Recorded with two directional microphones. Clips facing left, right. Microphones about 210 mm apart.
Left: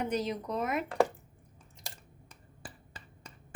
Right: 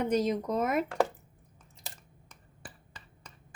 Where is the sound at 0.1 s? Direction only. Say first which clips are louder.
Right 5 dB; 45° right (ahead or behind).